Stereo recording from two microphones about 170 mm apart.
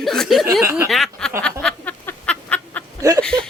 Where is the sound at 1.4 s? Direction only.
5° left (ahead or behind).